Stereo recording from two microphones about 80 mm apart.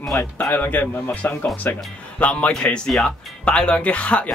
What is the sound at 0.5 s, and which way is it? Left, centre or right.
Speech, left.